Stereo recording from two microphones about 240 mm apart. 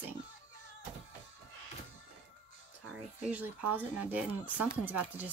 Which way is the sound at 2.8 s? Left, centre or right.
Centre.